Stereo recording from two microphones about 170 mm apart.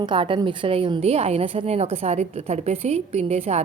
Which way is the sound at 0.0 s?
30° right (ahead or behind).